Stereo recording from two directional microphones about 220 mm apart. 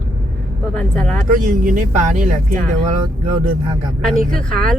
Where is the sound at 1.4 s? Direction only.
35° right (ahead or behind).